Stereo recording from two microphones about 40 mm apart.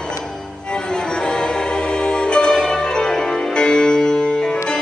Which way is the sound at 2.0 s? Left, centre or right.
Left.